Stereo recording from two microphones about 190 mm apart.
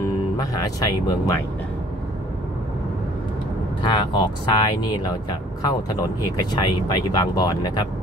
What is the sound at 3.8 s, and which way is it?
Speech, 25° left (ahead or behind).